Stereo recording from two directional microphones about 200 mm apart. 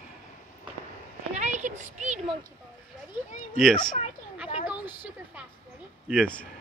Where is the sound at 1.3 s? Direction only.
35° right (ahead or behind).